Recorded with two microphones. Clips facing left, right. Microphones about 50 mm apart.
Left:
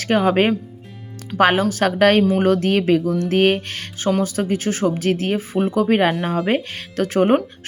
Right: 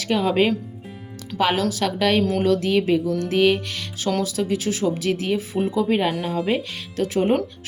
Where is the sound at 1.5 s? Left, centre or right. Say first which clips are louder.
Left 5 dB; left.